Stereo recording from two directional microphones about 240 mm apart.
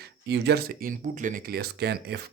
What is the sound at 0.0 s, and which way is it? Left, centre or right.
Speech, right.